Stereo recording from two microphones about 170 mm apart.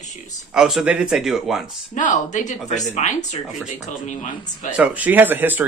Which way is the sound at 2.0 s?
50° left (ahead or behind).